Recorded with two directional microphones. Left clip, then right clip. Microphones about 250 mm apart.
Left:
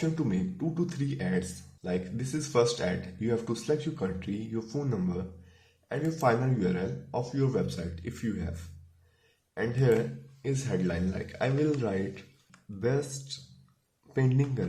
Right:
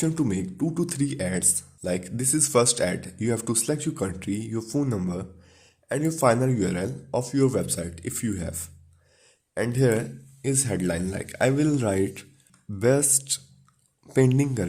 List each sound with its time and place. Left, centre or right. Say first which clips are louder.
0.0 s speech: right 5 dB; right
9.6 s speech: right 3 dB; right